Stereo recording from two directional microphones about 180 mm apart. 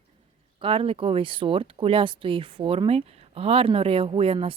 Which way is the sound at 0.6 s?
30° right (ahead or behind).